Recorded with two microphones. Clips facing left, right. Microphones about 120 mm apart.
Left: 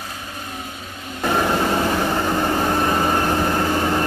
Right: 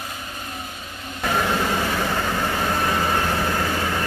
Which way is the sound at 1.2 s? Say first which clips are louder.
Left 3 dB; 20° left (ahead or behind).